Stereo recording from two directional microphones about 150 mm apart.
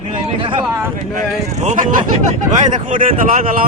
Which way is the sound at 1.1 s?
55° right (ahead or behind).